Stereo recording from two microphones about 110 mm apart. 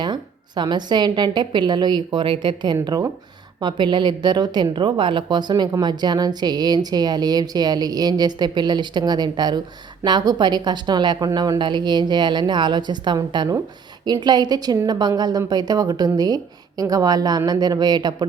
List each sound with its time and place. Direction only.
0.0 s a woman's voice: 45° right (ahead or behind)